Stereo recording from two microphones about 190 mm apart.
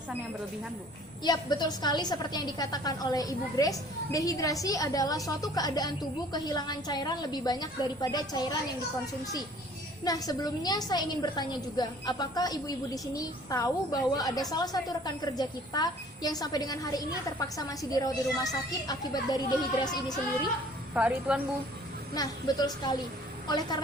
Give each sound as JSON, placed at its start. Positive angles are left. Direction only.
{"t": 1.2, "sound": "a woman's voice", "side_deg": 20}
{"t": 10.0, "sound": "a woman's voice", "side_deg": 20}
{"t": 20.9, "sound": "a woman's voice", "side_deg": -5}
{"t": 22.1, "sound": "a woman's voice", "side_deg": 20}